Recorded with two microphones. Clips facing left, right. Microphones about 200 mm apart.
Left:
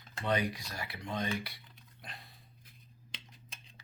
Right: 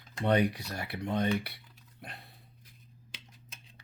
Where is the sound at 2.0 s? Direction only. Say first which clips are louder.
Right 3 dB; 60° right (ahead or behind).